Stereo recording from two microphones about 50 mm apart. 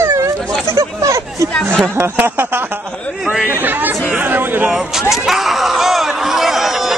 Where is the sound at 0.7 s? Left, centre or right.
Right.